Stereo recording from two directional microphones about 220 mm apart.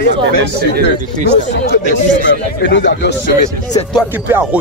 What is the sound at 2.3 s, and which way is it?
Speech, 55° left (ahead or behind).